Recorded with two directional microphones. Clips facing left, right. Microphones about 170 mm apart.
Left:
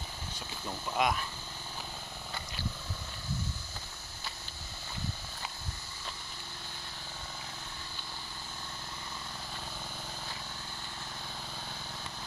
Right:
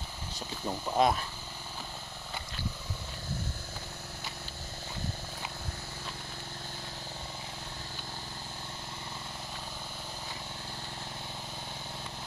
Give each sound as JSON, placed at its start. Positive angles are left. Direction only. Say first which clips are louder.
{"t": 0.7, "sound": "speech", "louder": "right 4 dB", "side_deg": -30}